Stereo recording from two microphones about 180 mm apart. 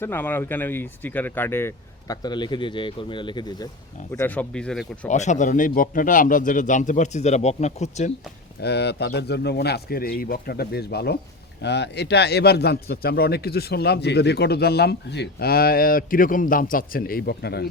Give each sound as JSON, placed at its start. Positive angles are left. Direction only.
{"t": 0.0, "sound": "speech", "side_deg": 10}
{"t": 4.1, "sound": "speech", "side_deg": 10}
{"t": 5.0, "sound": "a man's voice", "side_deg": 40}
{"t": 8.6, "sound": "a man's voice", "side_deg": 65}